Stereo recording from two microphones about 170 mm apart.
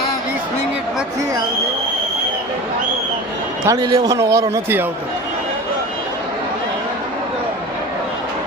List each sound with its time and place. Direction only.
3.7 s a man's voice: 20° right (ahead or behind)